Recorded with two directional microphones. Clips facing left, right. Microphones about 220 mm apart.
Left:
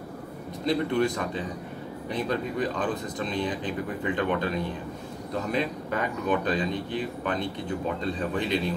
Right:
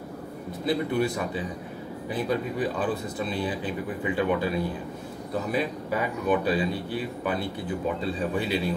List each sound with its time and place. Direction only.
0.7 s speech: 5° right (ahead or behind)